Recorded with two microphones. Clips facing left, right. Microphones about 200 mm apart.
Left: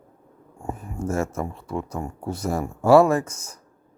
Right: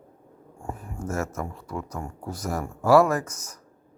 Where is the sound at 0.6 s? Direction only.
25° left (ahead or behind).